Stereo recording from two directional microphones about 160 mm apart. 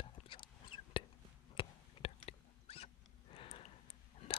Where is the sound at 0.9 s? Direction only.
30° left (ahead or behind).